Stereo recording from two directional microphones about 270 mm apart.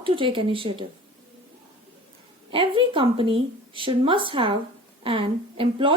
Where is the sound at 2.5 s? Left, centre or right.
Centre.